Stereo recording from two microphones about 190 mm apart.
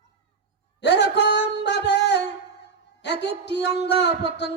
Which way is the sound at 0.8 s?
65° left (ahead or behind).